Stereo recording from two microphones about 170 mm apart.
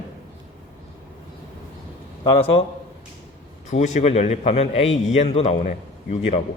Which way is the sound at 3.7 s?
45° left (ahead or behind).